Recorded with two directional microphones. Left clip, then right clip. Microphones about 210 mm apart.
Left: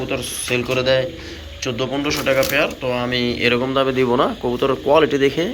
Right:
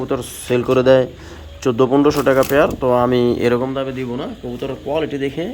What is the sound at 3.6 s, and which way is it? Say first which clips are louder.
Speech: left 5 dB; 15° right (ahead or behind).